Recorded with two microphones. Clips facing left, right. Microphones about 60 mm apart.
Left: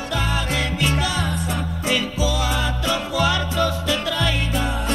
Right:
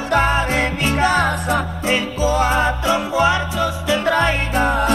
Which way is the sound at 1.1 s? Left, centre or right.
Right.